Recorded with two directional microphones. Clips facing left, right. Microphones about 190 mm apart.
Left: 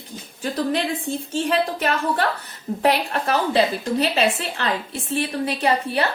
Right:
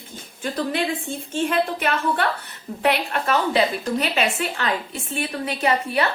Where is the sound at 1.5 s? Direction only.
40° left (ahead or behind).